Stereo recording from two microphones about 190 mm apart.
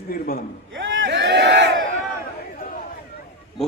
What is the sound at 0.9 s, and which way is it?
Crowd, 65° right (ahead or behind).